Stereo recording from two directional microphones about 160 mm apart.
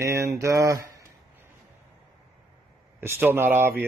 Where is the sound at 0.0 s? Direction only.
20° right (ahead or behind).